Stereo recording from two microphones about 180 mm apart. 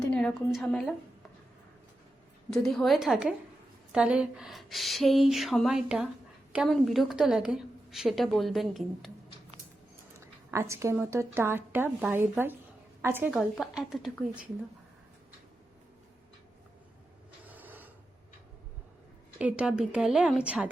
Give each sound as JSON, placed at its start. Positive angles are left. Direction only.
{"t": 0.1, "sound": "a woman's voice", "side_deg": 5}
{"t": 2.5, "sound": "a woman's voice", "side_deg": 0}
{"t": 10.5, "sound": "a woman's voice", "side_deg": -15}
{"t": 13.3, "sound": "a woman's voice", "side_deg": 0}
{"t": 17.5, "sound": "pulleys", "side_deg": -10}
{"t": 19.4, "sound": "a woman's voice", "side_deg": -5}